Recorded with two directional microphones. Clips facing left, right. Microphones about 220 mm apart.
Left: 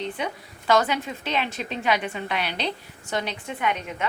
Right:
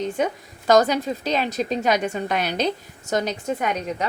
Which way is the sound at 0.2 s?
45° right (ahead or behind).